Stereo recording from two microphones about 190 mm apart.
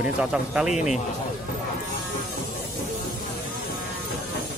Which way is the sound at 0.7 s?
40° left (ahead or behind).